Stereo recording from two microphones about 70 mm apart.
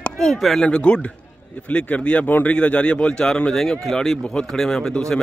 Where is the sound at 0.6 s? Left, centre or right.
Centre.